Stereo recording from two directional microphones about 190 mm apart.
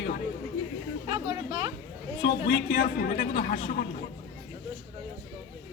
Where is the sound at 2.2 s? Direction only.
55° left (ahead or behind).